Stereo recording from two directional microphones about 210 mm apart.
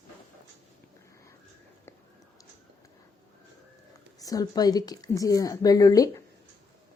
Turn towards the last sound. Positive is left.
turn(degrees=15)  # may be behind; listen again after turning